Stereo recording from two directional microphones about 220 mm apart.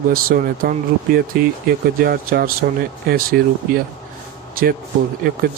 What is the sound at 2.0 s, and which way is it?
Speech, 45° right (ahead or behind).